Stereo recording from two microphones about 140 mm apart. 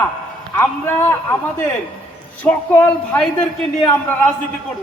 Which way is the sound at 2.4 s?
15° left (ahead or behind).